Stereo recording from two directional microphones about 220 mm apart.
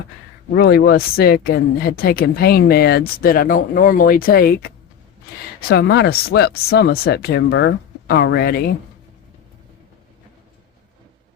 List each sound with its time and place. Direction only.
0.5 s speech: 45° left (ahead or behind)